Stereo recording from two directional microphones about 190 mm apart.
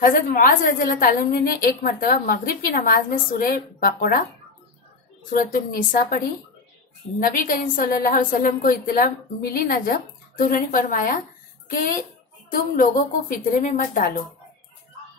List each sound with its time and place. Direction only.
0.0 s a woman's voice: 45° left (ahead or behind)
5.3 s a woman's voice: 45° left (ahead or behind)